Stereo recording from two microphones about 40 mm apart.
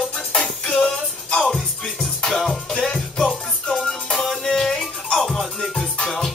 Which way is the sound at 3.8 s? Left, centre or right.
Centre.